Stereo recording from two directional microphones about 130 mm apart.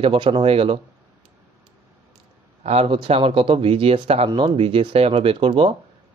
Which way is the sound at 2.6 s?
50° right (ahead or behind).